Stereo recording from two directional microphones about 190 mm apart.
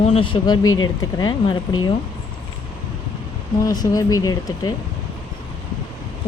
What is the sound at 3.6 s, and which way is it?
Speech, 20° left (ahead or behind).